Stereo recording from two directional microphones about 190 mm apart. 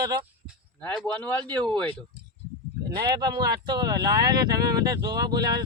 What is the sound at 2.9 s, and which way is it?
Speech, 20° right (ahead or behind).